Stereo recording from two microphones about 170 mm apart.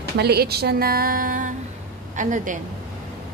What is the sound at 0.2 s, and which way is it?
A woman's voice, 70° right (ahead or behind).